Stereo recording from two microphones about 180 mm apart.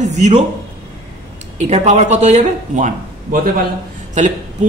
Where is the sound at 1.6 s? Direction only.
40° right (ahead or behind).